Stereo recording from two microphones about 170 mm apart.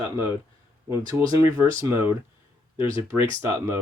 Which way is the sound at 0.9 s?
15° right (ahead or behind).